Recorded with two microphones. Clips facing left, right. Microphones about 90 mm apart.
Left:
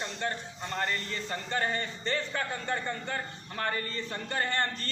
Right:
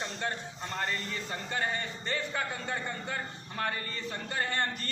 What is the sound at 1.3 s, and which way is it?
A man's voice, 15° right (ahead or behind).